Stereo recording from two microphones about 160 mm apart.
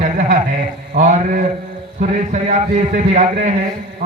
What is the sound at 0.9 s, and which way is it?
A man's voice, 50° right (ahead or behind).